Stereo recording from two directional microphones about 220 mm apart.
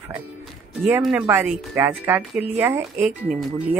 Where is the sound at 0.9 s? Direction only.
Centre (ahead or behind).